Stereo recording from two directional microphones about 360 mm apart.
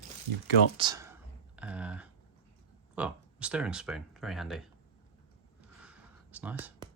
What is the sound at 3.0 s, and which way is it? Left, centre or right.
Speech, centre.